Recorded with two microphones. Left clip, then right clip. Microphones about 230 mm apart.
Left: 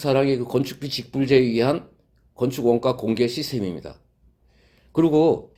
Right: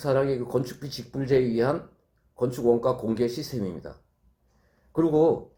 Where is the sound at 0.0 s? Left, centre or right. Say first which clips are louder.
Left 4 dB; left.